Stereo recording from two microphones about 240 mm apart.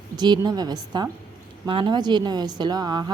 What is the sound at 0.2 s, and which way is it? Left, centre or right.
A woman's voice, centre.